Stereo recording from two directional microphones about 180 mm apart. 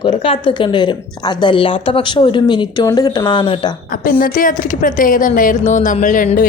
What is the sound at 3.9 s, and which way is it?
A woman's voice, 50° left (ahead or behind).